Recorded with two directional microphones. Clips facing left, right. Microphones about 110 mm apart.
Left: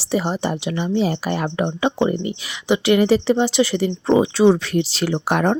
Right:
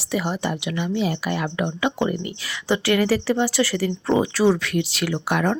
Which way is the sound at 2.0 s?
20° left (ahead or behind).